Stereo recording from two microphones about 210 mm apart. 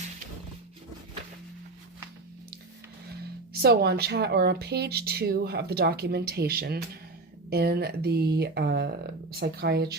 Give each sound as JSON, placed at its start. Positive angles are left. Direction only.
{"t": 3.1, "sound": "speech", "side_deg": -50}